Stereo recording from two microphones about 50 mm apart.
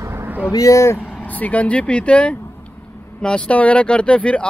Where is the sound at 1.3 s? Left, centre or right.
Left.